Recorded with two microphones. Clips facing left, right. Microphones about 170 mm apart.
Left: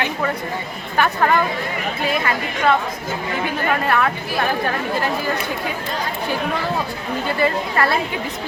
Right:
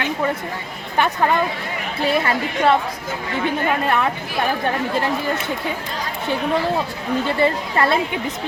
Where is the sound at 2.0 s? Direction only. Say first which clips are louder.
Right 3 dB; 30° right (ahead or behind).